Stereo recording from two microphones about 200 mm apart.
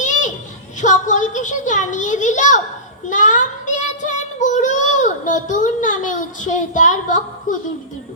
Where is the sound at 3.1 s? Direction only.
40° left (ahead or behind).